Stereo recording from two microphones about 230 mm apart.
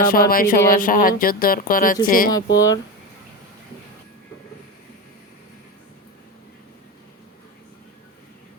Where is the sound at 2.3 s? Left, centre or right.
Centre.